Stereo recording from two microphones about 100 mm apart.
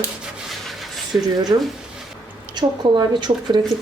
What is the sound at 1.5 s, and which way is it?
Speech, 45° right (ahead or behind).